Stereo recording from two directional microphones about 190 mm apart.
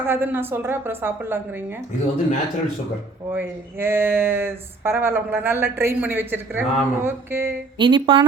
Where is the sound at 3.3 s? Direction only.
10° right (ahead or behind).